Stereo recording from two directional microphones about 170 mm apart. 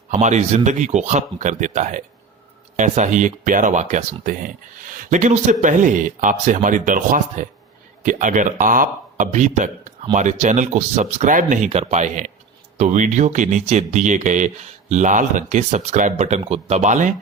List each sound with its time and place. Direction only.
0.1 s speech: 45° right (ahead or behind)